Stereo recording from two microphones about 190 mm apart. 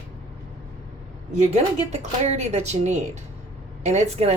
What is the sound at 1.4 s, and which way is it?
A woman's voice, 35° right (ahead or behind).